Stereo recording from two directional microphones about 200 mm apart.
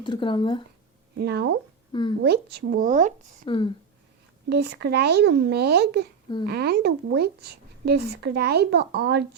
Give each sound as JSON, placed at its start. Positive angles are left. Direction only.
{"t": 0.0, "sound": "speech", "side_deg": 25}
{"t": 1.2, "sound": "speech", "side_deg": -55}
{"t": 1.9, "sound": "speech", "side_deg": 25}
{"t": 2.2, "sound": "speech", "side_deg": -55}
{"t": 3.4, "sound": "speech", "side_deg": 25}
{"t": 4.4, "sound": "speech", "side_deg": -55}